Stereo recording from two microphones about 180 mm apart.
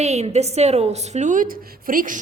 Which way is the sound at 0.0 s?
35° right (ahead or behind).